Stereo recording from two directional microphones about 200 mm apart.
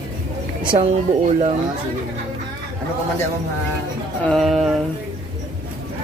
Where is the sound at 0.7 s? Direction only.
30° right (ahead or behind).